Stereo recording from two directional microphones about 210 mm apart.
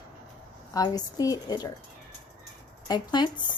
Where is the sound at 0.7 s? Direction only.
15° left (ahead or behind).